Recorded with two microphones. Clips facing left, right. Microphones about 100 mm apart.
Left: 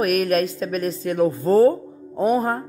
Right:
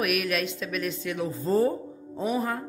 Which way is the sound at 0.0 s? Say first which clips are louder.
Left 8 dB; 40° left (ahead or behind).